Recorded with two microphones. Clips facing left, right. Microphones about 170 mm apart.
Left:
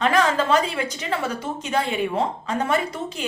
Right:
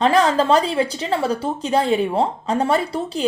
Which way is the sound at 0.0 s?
35° right (ahead or behind).